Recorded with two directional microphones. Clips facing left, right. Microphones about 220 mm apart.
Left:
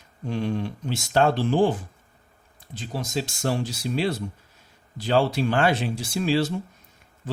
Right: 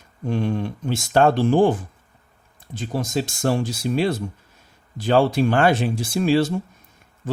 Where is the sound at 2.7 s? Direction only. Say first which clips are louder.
Right 5 dB; 50° right (ahead or behind).